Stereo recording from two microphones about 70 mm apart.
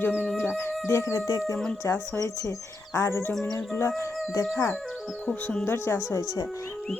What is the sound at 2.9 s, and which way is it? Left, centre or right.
Speech, left.